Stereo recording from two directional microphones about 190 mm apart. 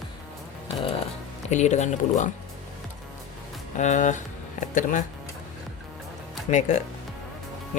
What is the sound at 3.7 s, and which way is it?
Speech, 40° left (ahead or behind).